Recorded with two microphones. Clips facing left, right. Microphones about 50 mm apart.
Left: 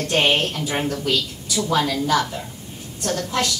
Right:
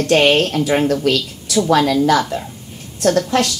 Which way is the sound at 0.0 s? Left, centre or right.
Right.